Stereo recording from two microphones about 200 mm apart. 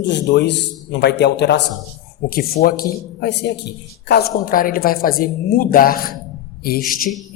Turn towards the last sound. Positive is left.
turn(degrees=45)  # may be behind; listen again after turning